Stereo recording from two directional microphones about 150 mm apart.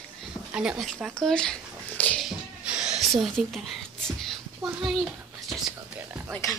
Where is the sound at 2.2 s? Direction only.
5° right (ahead or behind).